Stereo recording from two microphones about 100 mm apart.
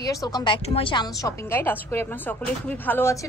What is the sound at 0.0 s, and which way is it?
Speech, 35° left (ahead or behind).